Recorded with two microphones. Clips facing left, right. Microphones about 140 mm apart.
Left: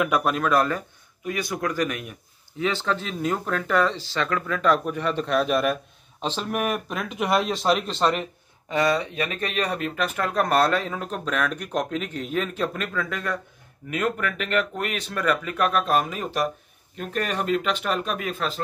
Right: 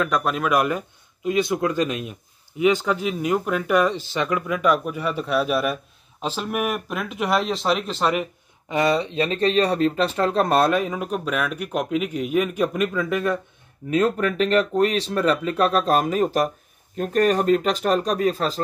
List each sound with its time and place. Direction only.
0.0 s speech: 5° left (ahead or behind)
0.5 s speech: 15° right (ahead or behind)
8.6 s speech: 20° right (ahead or behind)